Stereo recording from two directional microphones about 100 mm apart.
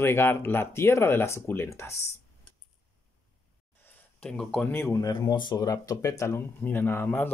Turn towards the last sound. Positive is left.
turn(degrees=20)  # may be behind; listen again after turning